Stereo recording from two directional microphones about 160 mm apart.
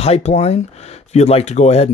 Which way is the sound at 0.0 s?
40° left (ahead or behind).